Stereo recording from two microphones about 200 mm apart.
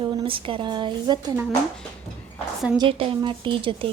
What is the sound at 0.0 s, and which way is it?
A woman's voice, 25° right (ahead or behind).